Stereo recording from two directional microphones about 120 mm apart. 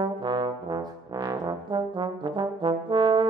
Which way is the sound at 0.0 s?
40° right (ahead or behind).